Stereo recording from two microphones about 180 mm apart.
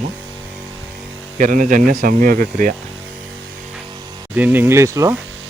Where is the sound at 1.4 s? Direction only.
45° right (ahead or behind).